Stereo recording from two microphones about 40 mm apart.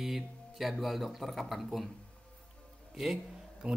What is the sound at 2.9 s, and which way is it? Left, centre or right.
Speech, centre.